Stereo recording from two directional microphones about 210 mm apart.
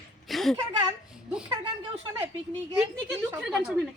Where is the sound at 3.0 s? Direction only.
5° right (ahead or behind).